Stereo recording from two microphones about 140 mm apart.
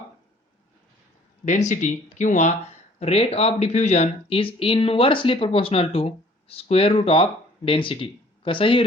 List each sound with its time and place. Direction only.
1.5 s speech: 60° left (ahead or behind)
3.0 s speech: 45° left (ahead or behind)